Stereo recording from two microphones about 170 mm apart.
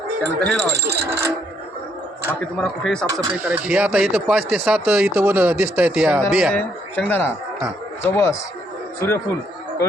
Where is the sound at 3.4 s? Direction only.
10° right (ahead or behind).